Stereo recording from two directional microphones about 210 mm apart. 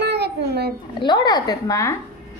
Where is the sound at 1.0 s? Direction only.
20° left (ahead or behind).